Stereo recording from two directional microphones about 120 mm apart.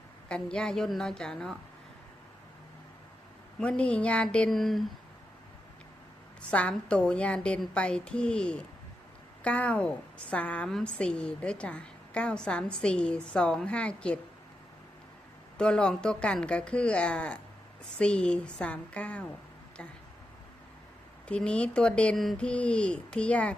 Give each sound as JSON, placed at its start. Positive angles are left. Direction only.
{"t": 0.3, "sound": "a woman's voice", "side_deg": 10}
{"t": 3.6, "sound": "a woman's voice", "side_deg": 10}
{"t": 6.5, "sound": "a woman's voice", "side_deg": 10}
{"t": 15.5, "sound": "a woman's voice", "side_deg": 5}
{"t": 21.2, "sound": "a woman's voice", "side_deg": 10}